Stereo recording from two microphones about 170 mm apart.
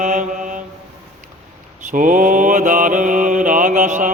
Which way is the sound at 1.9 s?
50° right (ahead or behind).